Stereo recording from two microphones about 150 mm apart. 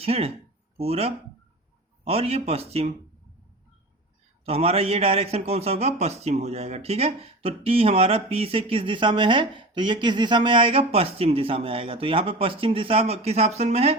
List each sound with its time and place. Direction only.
0.0 s speech: 40° right (ahead or behind)
4.4 s speech: 40° right (ahead or behind)